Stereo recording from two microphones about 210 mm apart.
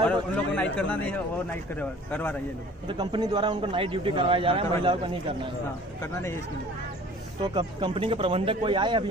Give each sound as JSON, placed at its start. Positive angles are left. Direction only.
{"t": 0.0, "sound": "a man's voice", "side_deg": 5}
{"t": 2.9, "sound": "a man's voice", "side_deg": -20}
{"t": 7.4, "sound": "a man's voice", "side_deg": -20}